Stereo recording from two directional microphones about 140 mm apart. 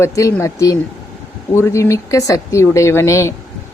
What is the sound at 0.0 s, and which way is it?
Speech, 20° left (ahead or behind).